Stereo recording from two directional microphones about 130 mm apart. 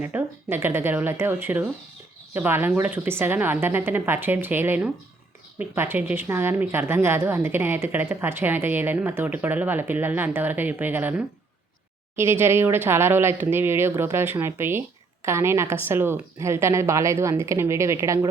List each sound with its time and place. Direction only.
0.0 s a woman's voice: 15° right (ahead or behind)